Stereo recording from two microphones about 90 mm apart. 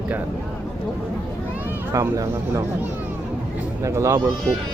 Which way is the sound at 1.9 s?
40° right (ahead or behind).